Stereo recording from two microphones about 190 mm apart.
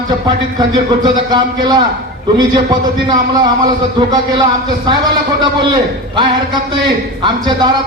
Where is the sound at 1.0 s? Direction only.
20° right (ahead or behind).